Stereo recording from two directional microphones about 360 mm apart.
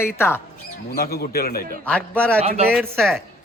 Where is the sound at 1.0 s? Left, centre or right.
Left.